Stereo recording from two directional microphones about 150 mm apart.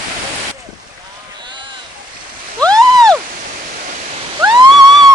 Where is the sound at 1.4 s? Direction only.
30° right (ahead or behind).